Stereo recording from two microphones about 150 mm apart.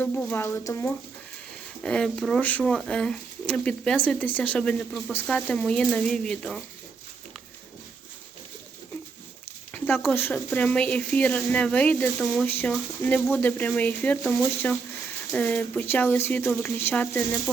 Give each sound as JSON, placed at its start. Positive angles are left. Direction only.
{"t": 0.0, "sound": "speech", "side_deg": 10}
{"t": 1.8, "sound": "speech", "side_deg": 5}
{"t": 9.7, "sound": "a sound", "side_deg": 10}
{"t": 10.2, "sound": "speech", "side_deg": 10}